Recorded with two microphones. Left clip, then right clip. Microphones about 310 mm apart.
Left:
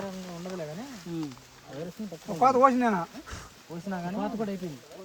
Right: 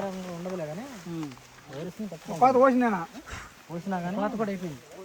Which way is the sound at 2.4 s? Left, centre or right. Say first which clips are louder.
Right 1 dB; left.